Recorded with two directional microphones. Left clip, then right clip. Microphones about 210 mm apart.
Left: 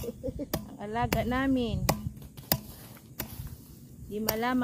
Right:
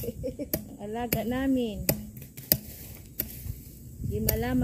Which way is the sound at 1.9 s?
55° right (ahead or behind).